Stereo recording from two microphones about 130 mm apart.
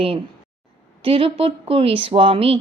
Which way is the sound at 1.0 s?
45° right (ahead or behind).